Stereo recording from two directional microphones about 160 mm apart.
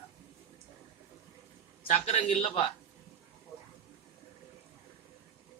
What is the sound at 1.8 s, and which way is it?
Speech, 45° left (ahead or behind).